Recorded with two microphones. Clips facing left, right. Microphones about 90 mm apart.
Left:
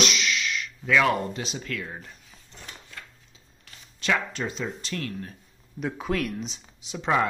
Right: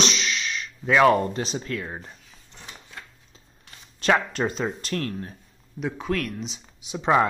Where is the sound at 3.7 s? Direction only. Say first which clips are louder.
Right 5 dB; 40° right (ahead or behind).